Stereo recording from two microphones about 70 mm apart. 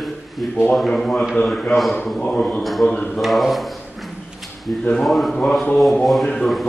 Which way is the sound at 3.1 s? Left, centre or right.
Centre.